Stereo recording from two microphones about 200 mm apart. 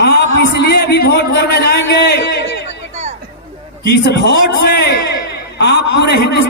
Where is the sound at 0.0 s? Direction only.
55° left (ahead or behind).